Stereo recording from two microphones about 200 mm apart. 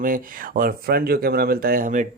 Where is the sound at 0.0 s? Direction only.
45° right (ahead or behind).